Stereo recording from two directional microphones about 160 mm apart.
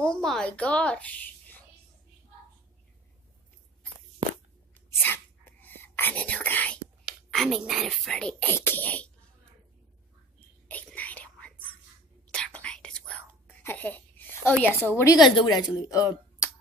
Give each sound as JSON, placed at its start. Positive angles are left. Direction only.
{"t": 0.0, "sound": "a woman's voice", "side_deg": 5}
{"t": 4.8, "sound": "whispering", "side_deg": 15}
{"t": 7.1, "sound": "speech", "side_deg": 0}
{"t": 10.7, "sound": "whispering", "side_deg": 10}
{"t": 14.9, "sound": "a woman's voice", "side_deg": 15}
{"t": 15.1, "sound": "speech", "side_deg": 25}